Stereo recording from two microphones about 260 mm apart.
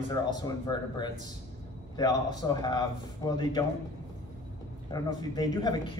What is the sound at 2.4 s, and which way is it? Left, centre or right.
A man's voice, centre.